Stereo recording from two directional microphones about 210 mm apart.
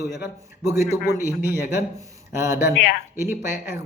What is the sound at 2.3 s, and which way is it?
Speech, 15° right (ahead or behind).